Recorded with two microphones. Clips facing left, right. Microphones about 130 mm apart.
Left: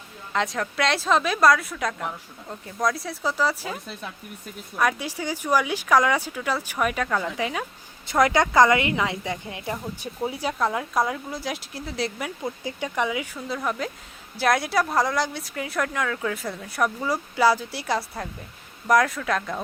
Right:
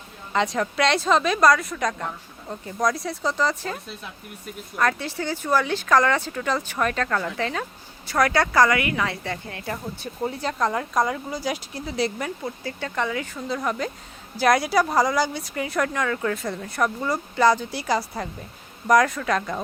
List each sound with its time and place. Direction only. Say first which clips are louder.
0.3 s speech: right 3 dB; centre (ahead or behind)
4.8 s speech: right 1 dB; 10° left (ahead or behind)
12.4 s speech: left 1 dB; 15° left (ahead or behind); by 19.6 s centre (ahead or behind)